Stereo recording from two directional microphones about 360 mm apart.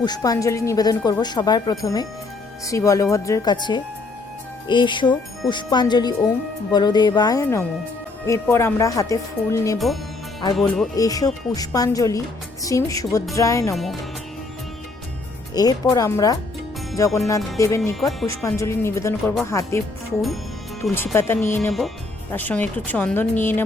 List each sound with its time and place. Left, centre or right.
0.0 s speech: centre
15.5 s speech: centre
20.8 s speech: centre